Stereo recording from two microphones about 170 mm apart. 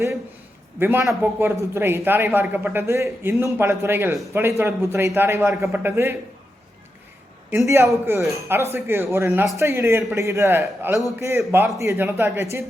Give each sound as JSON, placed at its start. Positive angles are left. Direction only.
{"t": 0.8, "sound": "speech", "side_deg": -15}
{"t": 8.0, "sound": "speech", "side_deg": -15}